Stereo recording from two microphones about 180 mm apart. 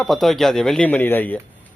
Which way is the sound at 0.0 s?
Centre (ahead or behind).